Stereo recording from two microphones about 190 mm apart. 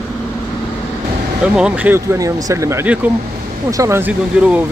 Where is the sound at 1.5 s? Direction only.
5° right (ahead or behind).